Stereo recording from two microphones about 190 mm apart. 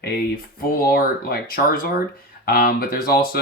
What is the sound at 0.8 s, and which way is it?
Speech, 50° left (ahead or behind).